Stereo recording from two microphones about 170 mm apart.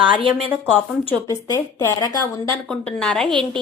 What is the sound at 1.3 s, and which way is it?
A woman's voice, 20° left (ahead or behind).